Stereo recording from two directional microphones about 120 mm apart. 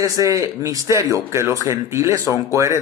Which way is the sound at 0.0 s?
30° right (ahead or behind).